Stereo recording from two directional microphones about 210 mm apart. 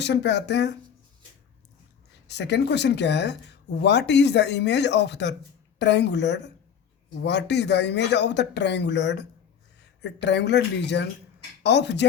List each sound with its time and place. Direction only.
0.0 s speech: 55° left (ahead or behind)
2.2 s speech: 55° left (ahead or behind)